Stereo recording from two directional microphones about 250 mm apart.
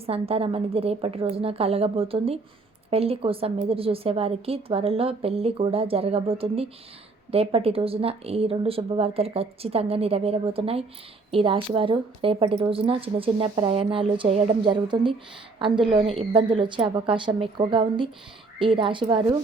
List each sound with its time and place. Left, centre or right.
0.0 s speech: right